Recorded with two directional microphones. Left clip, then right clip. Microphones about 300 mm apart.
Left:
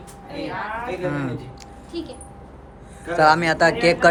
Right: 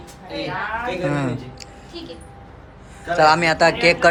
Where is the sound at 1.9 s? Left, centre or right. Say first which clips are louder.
Left 4 dB; centre.